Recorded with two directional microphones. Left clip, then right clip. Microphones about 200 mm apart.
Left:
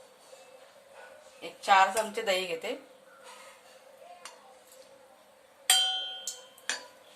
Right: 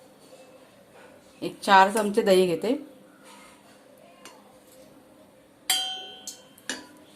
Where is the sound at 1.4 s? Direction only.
45° right (ahead or behind).